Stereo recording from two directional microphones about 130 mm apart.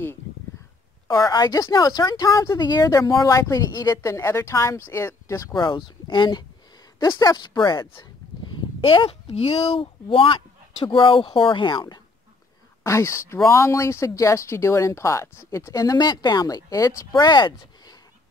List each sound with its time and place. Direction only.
1.1 s speech: 30° left (ahead or behind)
12.8 s speech: 20° left (ahead or behind)